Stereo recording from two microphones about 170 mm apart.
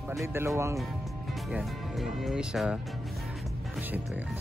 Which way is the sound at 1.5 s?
Centre (ahead or behind).